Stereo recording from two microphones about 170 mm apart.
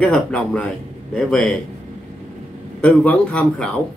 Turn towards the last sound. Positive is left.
turn(degrees=5)  # may be behind; listen again after turning